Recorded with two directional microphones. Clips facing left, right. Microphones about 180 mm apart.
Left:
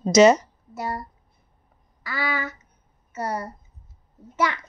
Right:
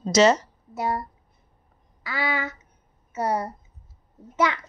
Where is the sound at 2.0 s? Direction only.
20° right (ahead or behind).